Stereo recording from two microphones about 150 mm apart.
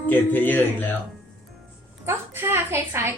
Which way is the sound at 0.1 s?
10° left (ahead or behind).